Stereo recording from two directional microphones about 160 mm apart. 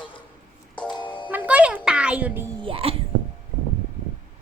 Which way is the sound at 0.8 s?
30° left (ahead or behind).